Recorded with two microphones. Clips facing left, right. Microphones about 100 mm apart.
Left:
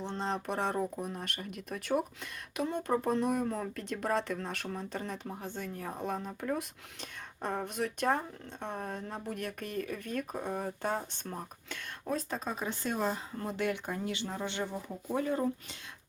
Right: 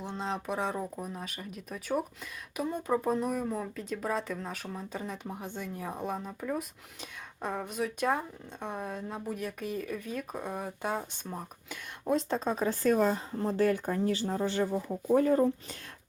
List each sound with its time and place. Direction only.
0.0 s speech: 5° right (ahead or behind)
12.1 s speech: 30° right (ahead or behind)